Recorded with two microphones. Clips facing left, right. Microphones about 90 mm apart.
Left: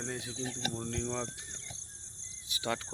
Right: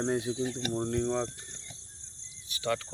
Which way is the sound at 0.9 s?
10° right (ahead or behind).